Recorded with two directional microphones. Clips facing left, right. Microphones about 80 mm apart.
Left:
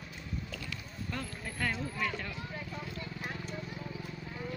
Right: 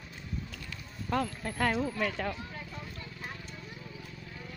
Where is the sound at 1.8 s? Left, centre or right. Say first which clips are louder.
Right 5 dB; right.